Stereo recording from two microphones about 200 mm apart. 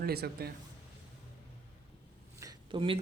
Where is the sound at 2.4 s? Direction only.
20° right (ahead or behind).